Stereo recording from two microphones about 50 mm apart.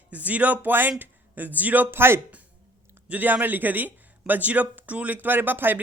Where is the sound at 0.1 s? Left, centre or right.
Right.